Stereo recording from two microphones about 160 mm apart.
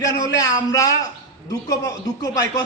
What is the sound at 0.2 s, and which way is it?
A man's voice, 20° left (ahead or behind).